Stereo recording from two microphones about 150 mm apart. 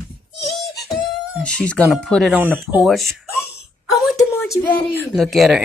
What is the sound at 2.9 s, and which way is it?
Speech, centre (ahead or behind).